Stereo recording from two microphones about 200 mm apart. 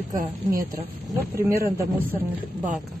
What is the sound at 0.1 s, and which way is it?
Speech, 45° right (ahead or behind).